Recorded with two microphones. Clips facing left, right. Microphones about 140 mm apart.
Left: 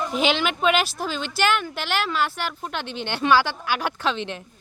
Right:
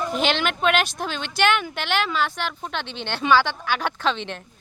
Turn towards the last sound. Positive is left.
turn(degrees=5)  # may be behind; listen again after turning